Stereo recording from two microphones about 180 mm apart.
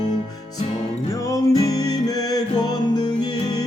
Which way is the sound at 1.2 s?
20° left (ahead or behind).